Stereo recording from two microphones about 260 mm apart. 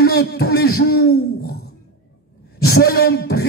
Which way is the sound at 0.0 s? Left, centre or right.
Left.